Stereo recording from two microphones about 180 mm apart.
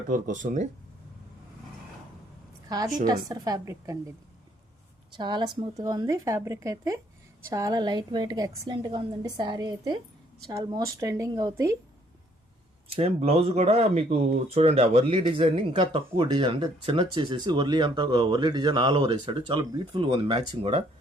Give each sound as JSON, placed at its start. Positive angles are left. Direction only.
{"t": 0.1, "sound": "speech", "side_deg": -45}
{"t": 2.6, "sound": "a woman's voice", "side_deg": -20}
{"t": 5.1, "sound": "speech", "side_deg": -25}
{"t": 13.0, "sound": "speech", "side_deg": -35}